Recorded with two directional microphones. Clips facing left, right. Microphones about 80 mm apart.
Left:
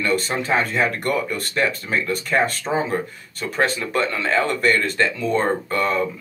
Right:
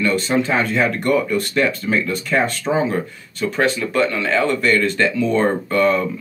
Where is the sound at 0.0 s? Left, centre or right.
Left.